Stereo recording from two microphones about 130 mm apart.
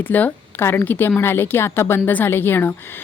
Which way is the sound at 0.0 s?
15° left (ahead or behind).